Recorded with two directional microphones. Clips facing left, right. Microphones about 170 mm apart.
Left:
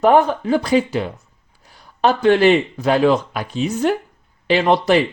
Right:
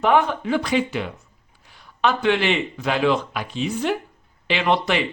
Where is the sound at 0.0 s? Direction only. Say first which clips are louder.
Left 5 dB; 40° left (ahead or behind).